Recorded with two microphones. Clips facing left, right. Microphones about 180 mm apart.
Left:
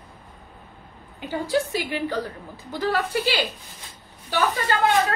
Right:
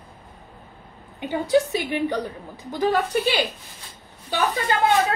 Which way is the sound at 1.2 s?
20° right (ahead or behind).